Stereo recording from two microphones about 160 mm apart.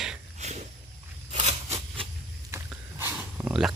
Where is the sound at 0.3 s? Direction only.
45° right (ahead or behind).